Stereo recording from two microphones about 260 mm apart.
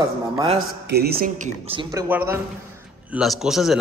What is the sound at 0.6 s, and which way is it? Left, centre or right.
Speech, right.